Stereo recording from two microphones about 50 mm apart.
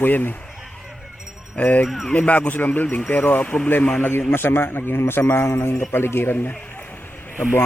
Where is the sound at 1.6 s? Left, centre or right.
Left.